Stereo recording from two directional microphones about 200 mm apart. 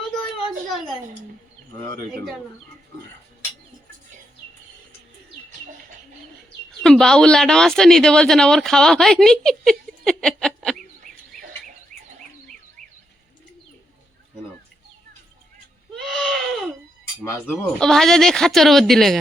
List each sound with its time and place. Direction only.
6.7 s speech: centre (ahead or behind)
11.1 s bird: centre (ahead or behind)
11.9 s bird: 40° right (ahead or behind)
16.0 s a sound: centre (ahead or behind)
17.2 s speech: 10° left (ahead or behind)